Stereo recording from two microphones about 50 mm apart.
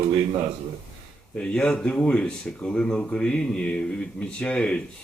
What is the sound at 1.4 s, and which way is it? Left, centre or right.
Speech, centre.